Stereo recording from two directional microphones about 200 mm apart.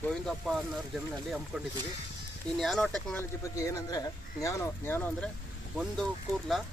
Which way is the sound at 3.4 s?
15° left (ahead or behind).